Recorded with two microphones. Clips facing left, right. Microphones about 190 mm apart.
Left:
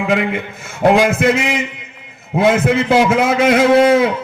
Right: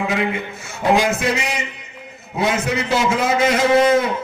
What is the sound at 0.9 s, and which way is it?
A man's voice, 60° left (ahead or behind).